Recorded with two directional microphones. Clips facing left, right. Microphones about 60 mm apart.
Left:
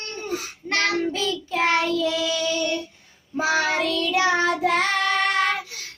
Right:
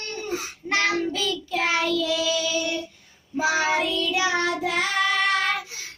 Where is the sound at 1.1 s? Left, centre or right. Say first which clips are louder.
Left 1 dB; left.